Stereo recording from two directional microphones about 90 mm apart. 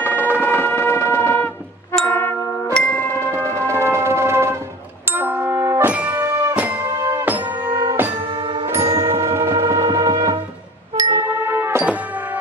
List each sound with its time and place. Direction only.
0.0 s a sound: 20° right (ahead or behind)
0.7 s a sound: 25° left (ahead or behind)
2.0 s music: 25° left (ahead or behind)
3.2 s music: 30° right (ahead or behind)
5.6 s music: 35° right (ahead or behind)
5.9 s music: 15° right (ahead or behind)
6.9 s music: 35° right (ahead or behind)
7.6 s music: 65° right (ahead or behind)
8.6 s music: 30° right (ahead or behind)
9.8 s music: 45° right (ahead or behind)
11.2 s music: 25° right (ahead or behind)